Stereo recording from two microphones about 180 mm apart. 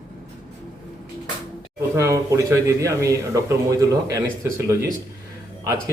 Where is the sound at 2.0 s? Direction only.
15° right (ahead or behind).